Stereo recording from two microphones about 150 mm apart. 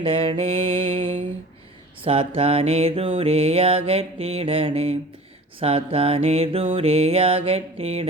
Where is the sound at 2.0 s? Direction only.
40° right (ahead or behind).